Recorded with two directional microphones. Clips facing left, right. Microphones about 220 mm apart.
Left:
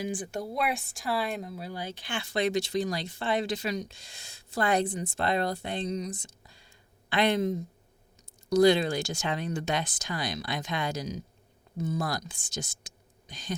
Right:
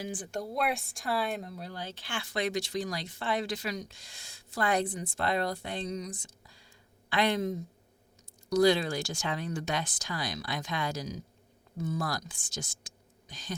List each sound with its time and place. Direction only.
0.0 s speech: 10° left (ahead or behind)